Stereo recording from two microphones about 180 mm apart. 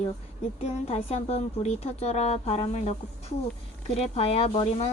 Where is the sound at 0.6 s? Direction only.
35° left (ahead or behind).